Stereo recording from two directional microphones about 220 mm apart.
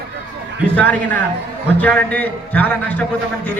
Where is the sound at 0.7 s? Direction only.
5° left (ahead or behind).